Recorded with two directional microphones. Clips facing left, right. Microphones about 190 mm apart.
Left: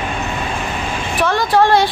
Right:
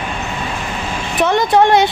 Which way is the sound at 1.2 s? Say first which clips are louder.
Right 2 dB; 20° right (ahead or behind).